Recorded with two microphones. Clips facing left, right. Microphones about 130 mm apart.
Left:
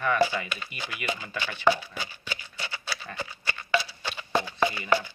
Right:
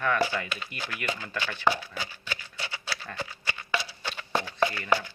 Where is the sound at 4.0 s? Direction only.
10° left (ahead or behind).